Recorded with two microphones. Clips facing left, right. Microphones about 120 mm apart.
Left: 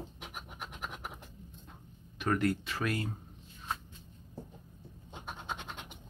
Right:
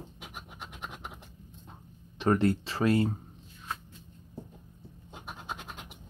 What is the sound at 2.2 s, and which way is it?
Speech, 30° right (ahead or behind).